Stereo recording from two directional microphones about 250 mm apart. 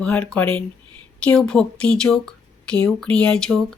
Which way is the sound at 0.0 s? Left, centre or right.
Centre.